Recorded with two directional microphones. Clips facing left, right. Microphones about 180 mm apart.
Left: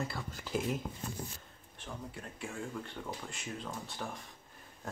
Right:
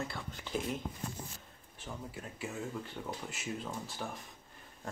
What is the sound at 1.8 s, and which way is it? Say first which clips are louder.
Speech: even; 5° right (ahead or behind).